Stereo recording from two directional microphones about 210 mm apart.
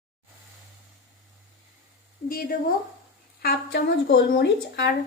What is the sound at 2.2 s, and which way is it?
A woman's voice, 45° left (ahead or behind).